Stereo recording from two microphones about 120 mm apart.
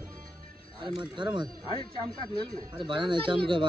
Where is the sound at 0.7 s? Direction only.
40° right (ahead or behind).